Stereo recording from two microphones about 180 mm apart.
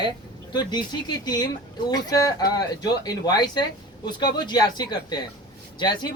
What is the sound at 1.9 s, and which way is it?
Speech, 20° left (ahead or behind).